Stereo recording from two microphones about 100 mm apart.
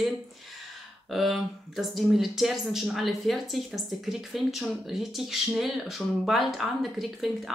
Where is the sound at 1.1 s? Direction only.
Centre (ahead or behind).